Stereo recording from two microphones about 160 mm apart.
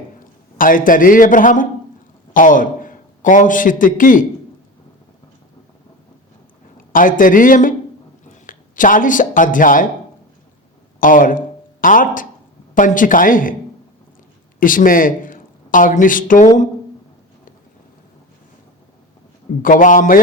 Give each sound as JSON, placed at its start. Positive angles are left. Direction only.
{"t": 0.6, "sound": "a man's voice", "side_deg": 55}
{"t": 6.9, "sound": "a man's voice", "side_deg": 55}
{"t": 11.0, "sound": "a man's voice", "side_deg": 55}
{"t": 14.6, "sound": "speech", "side_deg": 60}
{"t": 19.6, "sound": "a man's voice", "side_deg": 55}